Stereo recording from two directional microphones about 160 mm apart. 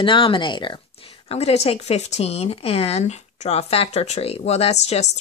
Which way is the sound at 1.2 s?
40° left (ahead or behind).